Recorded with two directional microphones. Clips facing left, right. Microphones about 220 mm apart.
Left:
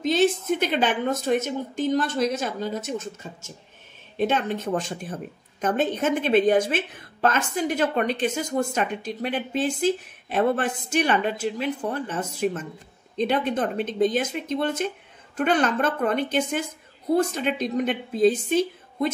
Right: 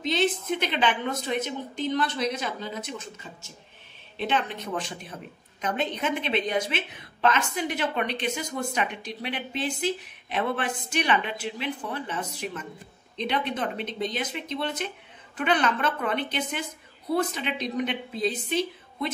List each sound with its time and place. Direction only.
0.0 s a woman's voice: 45° left (ahead or behind)